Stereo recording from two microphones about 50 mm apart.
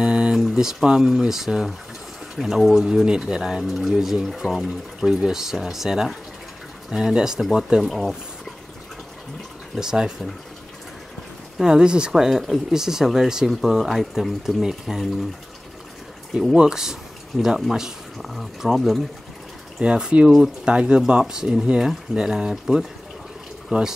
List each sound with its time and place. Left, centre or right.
0.0 s a sound: right
0.4 s speech: centre
3.1 s speech: centre
9.8 s speech: centre
11.5 s speech: centre
16.5 s speech: centre
19.8 s speech: centre
20.2 s speech: centre
20.6 s speech: centre